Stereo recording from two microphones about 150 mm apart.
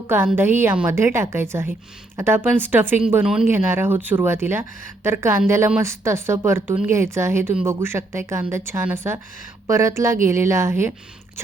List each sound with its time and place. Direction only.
0.3 s a woman's voice: 15° right (ahead or behind)